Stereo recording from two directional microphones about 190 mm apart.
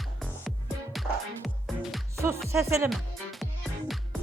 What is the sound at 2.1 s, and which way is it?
Music, 15° right (ahead or behind).